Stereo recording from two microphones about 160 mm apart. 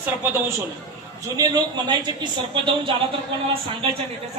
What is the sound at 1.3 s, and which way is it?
A man's voice, 25° right (ahead or behind).